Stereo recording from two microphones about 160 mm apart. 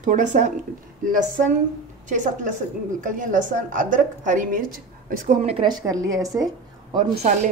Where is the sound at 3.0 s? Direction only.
55° right (ahead or behind).